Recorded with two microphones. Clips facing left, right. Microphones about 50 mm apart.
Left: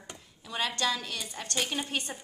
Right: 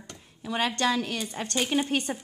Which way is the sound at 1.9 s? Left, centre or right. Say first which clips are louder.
Right 6 dB; right.